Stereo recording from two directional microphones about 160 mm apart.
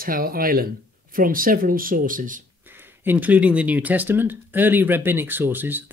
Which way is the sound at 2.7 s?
10° right (ahead or behind).